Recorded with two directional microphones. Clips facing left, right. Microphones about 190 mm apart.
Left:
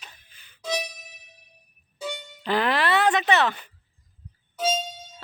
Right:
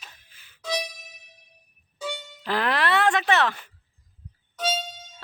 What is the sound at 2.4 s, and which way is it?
Speech, centre (ahead or behind).